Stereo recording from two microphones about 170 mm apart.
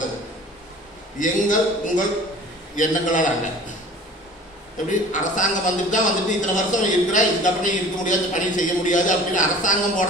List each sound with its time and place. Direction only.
1.2 s a man's voice: 50° left (ahead or behind)
4.8 s a man's voice: 45° left (ahead or behind)